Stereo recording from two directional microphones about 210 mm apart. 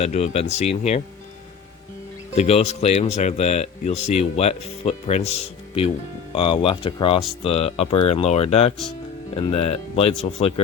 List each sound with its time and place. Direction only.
0.0 s speech: 30° left (ahead or behind)
2.3 s speech: 30° left (ahead or behind)